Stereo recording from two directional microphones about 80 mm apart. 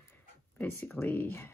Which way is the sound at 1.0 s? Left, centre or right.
Left.